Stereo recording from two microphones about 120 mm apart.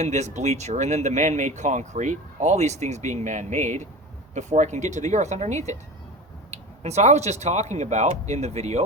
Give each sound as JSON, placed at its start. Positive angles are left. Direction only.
{"t": 0.0, "sound": "speech", "side_deg": -70}